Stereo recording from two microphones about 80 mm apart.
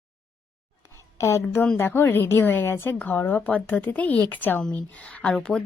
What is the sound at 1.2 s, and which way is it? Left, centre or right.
A woman's voice, left.